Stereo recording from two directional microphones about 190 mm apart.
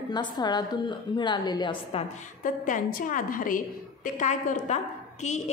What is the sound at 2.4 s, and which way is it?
A woman's voice, 45° left (ahead or behind).